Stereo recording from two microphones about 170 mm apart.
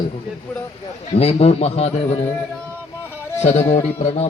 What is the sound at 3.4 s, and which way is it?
Speech, 40° left (ahead or behind).